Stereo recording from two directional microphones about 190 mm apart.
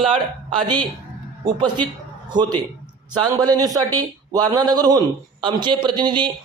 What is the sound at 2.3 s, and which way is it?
A man's voice, 20° right (ahead or behind).